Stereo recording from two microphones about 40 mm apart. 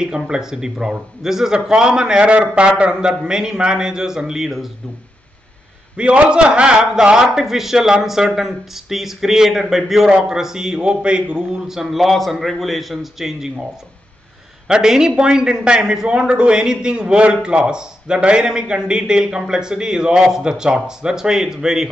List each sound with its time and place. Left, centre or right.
0.0 s a man's voice: centre
5.9 s a man's voice: right
11.6 s a man's voice: centre
14.7 s a man's voice: centre